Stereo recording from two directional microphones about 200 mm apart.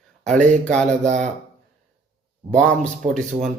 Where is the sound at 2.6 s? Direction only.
5° left (ahead or behind).